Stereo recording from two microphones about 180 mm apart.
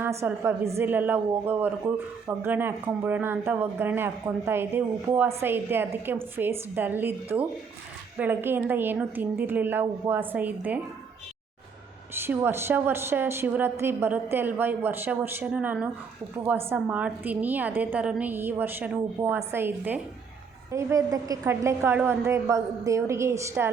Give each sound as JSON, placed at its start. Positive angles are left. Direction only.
{"t": 0.0, "sound": "a woman's voice", "side_deg": -15}
{"t": 12.1, "sound": "a woman's voice", "side_deg": -10}